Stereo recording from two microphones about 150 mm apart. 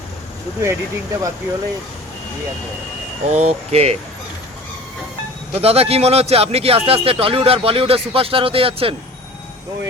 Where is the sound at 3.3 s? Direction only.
45° right (ahead or behind).